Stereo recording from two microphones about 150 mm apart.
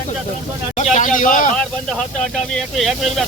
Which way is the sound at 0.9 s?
60° left (ahead or behind).